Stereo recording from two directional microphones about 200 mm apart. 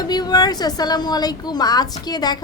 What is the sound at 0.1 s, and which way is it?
A woman's voice, 20° left (ahead or behind).